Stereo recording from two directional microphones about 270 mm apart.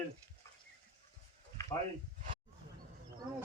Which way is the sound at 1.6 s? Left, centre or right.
Centre.